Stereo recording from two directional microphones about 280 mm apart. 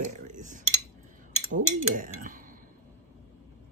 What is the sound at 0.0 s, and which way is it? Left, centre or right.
Cutlery, right.